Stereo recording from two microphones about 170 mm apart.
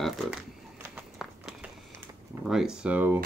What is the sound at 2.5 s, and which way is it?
Speech, 5° right (ahead or behind).